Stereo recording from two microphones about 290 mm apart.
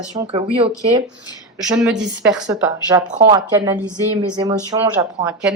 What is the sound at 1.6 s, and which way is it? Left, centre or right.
A woman's voice, centre.